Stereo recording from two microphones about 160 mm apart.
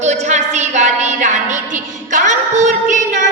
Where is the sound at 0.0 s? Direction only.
45° right (ahead or behind).